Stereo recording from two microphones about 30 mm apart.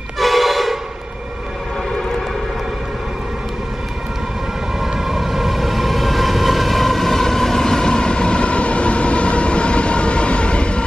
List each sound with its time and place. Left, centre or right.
0.2 s train: centre
4.7 s train: centre; by 10.8 s left